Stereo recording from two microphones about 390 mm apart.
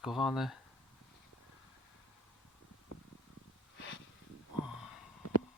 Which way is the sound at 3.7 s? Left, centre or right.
Left.